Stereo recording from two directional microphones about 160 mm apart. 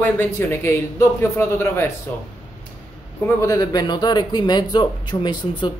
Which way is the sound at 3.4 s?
20° left (ahead or behind).